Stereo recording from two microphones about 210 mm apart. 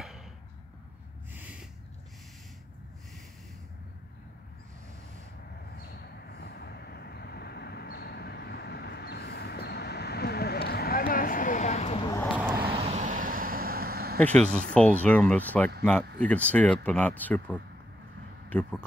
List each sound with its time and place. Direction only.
5.9 s vehicle: 50° left (ahead or behind)
12.0 s a sound: 15° left (ahead or behind)
12.4 s vehicle: 10° right (ahead or behind)
12.7 s vehicle: 30° right (ahead or behind); by 14.1 s 45° right (ahead or behind)
14.1 s speech: 5° left (ahead or behind)